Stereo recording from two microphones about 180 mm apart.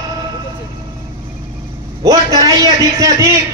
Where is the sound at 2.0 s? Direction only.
20° right (ahead or behind).